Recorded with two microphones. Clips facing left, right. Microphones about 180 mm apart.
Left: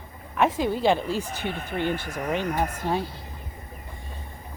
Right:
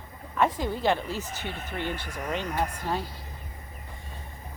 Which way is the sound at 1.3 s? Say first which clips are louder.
Left 5 dB; 15° left (ahead or behind).